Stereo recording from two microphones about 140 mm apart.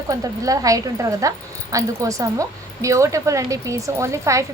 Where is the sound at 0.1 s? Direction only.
25° right (ahead or behind).